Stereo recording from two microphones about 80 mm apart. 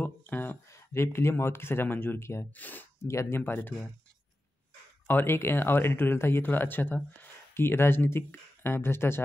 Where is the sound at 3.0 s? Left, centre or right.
Left.